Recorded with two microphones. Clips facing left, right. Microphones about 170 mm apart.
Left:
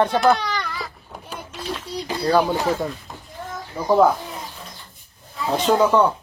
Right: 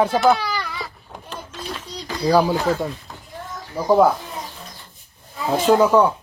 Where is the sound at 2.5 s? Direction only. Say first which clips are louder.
Right 1 dB; 20° left (ahead or behind).